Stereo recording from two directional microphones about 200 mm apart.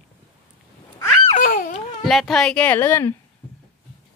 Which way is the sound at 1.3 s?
40° left (ahead or behind).